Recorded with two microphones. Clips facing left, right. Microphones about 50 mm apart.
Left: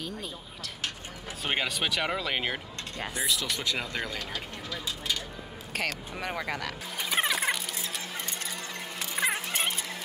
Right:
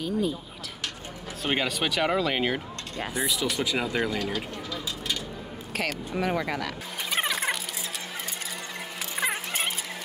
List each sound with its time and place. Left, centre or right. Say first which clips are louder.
0.0 s speech: right 10 dB; centre
1.4 s speech: right 3 dB; centre
6.1 s vehicle: right 6 dB; centre
9.1 s a sound: even; centre